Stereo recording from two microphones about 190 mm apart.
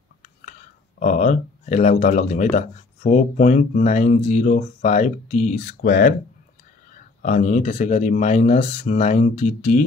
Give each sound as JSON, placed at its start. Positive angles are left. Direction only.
{"t": 0.5, "sound": "speech", "side_deg": 40}
{"t": 7.2, "sound": "speech", "side_deg": 40}